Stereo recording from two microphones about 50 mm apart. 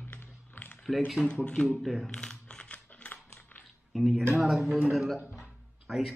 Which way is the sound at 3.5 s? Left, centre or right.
Left.